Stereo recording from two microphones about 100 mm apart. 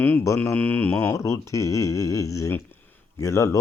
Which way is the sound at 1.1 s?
30° left (ahead or behind).